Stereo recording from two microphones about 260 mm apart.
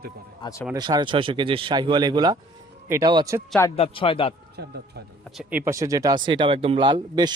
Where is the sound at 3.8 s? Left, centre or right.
Left.